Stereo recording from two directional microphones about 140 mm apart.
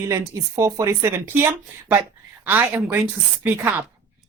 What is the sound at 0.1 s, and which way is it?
Speech, 20° right (ahead or behind).